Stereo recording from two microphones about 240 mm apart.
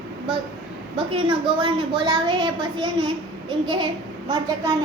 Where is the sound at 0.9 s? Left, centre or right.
Right.